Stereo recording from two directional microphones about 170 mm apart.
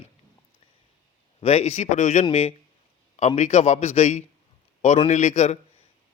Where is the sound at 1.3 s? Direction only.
40° left (ahead or behind).